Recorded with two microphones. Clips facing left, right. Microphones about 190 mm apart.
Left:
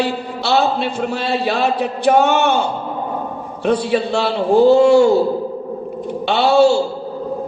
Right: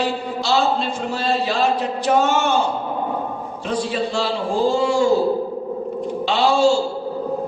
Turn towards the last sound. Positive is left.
turn(degrees=65)  # may be behind; listen again after turning